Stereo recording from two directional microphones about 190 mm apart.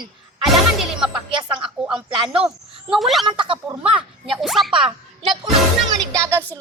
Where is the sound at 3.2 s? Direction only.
25° right (ahead or behind).